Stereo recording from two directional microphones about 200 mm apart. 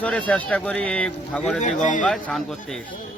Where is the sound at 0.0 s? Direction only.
5° left (ahead or behind).